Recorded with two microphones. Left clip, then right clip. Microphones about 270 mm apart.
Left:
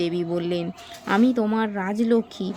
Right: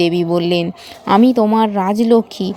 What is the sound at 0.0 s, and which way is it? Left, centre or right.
Speech, right.